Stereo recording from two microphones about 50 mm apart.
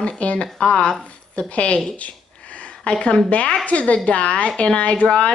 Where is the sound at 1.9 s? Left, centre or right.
Left.